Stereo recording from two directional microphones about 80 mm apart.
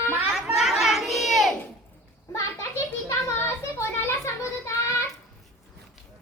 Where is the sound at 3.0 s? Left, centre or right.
Left.